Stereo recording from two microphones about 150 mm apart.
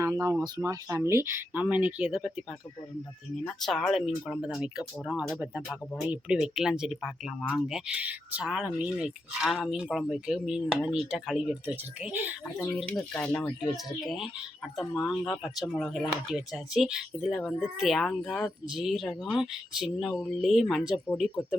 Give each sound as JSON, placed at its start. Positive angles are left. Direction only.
{"t": 0.0, "sound": "speech", "side_deg": -20}
{"t": 3.4, "sound": "speech", "side_deg": 0}